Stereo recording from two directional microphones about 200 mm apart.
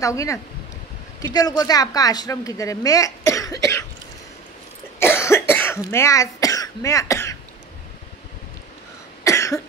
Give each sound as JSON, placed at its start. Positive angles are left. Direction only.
{"t": 0.0, "sound": "a woman's voice", "side_deg": 15}
{"t": 4.9, "sound": "cough", "side_deg": 10}
{"t": 9.2, "sound": "cough", "side_deg": 15}